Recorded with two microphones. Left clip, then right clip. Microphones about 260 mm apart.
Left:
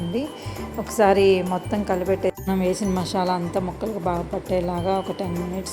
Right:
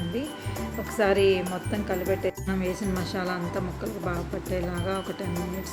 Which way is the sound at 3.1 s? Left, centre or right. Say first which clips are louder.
Left 9 dB; centre.